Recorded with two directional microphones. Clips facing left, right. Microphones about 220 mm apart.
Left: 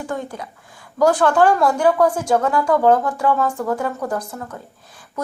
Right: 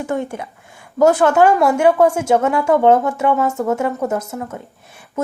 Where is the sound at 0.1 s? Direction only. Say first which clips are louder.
Right 5 dB; 25° right (ahead or behind).